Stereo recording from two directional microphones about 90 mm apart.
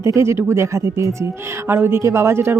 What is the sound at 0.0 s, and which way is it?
Speech, 30° right (ahead or behind).